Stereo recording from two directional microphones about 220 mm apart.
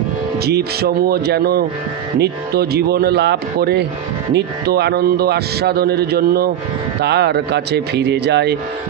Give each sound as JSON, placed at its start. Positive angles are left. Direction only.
{"t": 0.5, "sound": "a man's voice", "side_deg": -45}